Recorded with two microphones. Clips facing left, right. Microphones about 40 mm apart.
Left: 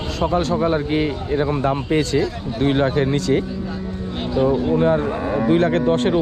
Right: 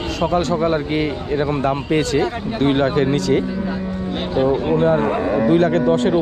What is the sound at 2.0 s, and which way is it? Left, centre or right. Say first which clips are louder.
Speech: right 1 dB; right.